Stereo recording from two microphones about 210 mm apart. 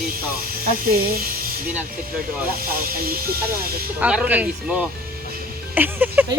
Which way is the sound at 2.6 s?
45° right (ahead or behind).